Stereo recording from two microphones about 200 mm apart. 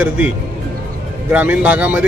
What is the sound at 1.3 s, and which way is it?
Speech, 5° right (ahead or behind).